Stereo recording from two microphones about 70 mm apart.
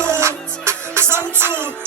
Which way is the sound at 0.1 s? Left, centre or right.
Right.